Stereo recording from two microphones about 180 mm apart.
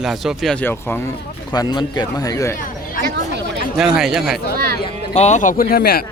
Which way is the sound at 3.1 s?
70° right (ahead or behind).